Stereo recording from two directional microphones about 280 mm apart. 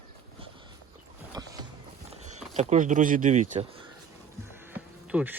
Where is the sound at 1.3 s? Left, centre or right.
Centre.